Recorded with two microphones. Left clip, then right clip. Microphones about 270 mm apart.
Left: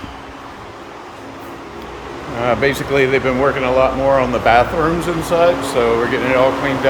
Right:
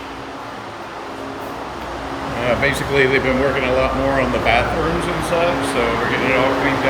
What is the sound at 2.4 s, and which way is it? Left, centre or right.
Speech, centre.